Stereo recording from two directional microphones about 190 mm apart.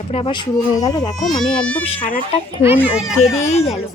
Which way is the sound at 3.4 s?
35° left (ahead or behind).